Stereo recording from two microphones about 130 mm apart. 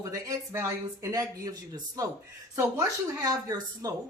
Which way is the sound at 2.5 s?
25° right (ahead or behind).